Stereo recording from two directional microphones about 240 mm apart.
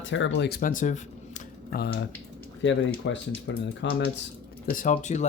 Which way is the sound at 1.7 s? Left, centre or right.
Left.